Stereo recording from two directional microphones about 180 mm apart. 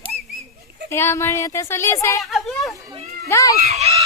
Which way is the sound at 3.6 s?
35° right (ahead or behind).